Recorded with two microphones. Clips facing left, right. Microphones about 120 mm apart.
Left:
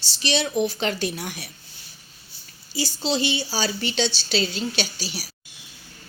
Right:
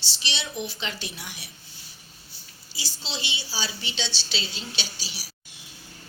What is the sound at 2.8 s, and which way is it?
A woman's voice, 45° left (ahead or behind).